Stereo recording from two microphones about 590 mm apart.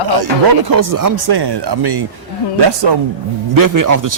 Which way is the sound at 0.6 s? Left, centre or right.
Right.